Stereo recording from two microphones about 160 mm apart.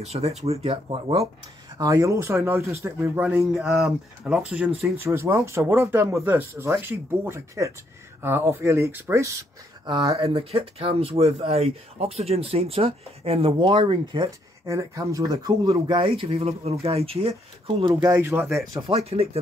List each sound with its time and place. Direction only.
0.0 s speech: 40° right (ahead or behind)
1.8 s speech: 20° right (ahead or behind)
9.8 s speech: 30° right (ahead or behind)
14.7 s speech: 20° right (ahead or behind); by 17.9 s 35° right (ahead or behind)
18.0 s speech: 15° right (ahead or behind)
18.8 s speech: 35° right (ahead or behind)